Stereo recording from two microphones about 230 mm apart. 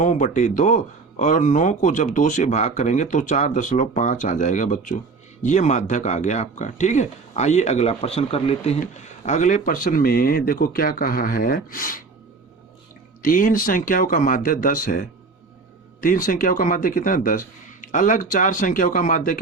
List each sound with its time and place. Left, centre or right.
0.0 s speech: left
13.2 s speech: left